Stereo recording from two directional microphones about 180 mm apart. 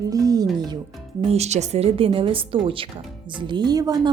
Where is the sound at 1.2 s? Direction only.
35° right (ahead or behind).